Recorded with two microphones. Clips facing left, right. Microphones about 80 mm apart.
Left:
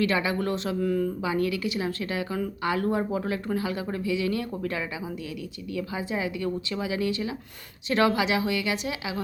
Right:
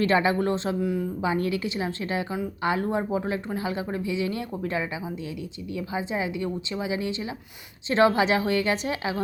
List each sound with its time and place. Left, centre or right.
0.0 s speech: right
0.8 s speech: centre
1.2 s a woman's voice: right